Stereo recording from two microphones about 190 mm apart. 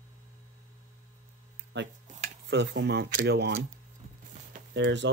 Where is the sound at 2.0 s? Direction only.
40° right (ahead or behind).